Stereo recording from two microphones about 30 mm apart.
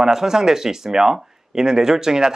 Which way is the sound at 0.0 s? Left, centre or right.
Centre.